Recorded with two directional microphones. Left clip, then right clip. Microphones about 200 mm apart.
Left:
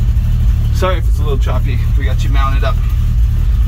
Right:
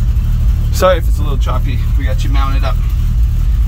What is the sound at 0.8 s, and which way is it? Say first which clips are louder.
Speech: right 7 dB; 65° right (ahead or behind).